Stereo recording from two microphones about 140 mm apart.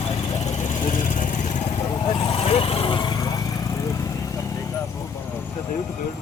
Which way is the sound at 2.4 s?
45° left (ahead or behind).